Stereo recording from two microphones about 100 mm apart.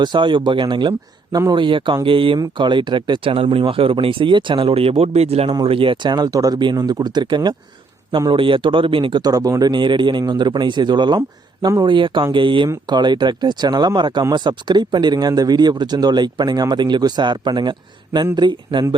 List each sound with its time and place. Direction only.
0.0 s speech: 50° right (ahead or behind)
3.3 s speech: 65° right (ahead or behind); by 5.5 s 90° right
5.6 s speech: 65° right (ahead or behind)
9.2 s speech: 40° right (ahead or behind)